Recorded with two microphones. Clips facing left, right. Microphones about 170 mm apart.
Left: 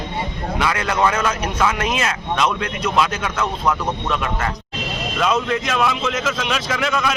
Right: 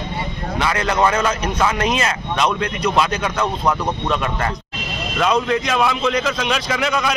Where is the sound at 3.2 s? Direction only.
10° right (ahead or behind).